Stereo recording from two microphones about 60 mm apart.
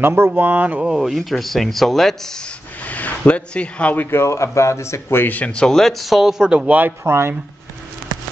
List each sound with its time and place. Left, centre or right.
0.0 s speech: right
0.4 s speech: right
0.9 s speech: centre
2.9 s speech: left
4.2 s speech: left
5.2 s speech: left
5.5 s speech: centre
6.6 s speech: right
7.1 s speech: right